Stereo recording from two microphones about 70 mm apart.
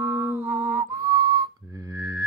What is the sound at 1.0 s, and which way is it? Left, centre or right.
Whistle, right.